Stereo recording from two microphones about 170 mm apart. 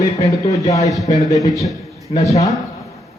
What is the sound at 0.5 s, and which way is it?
Speech, 20° left (ahead or behind).